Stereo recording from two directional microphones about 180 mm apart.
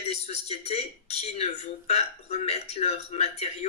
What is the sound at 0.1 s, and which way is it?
Speech, 35° left (ahead or behind).